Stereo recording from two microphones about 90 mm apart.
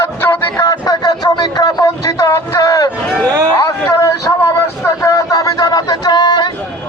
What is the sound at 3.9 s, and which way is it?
Vehicle, 30° left (ahead or behind).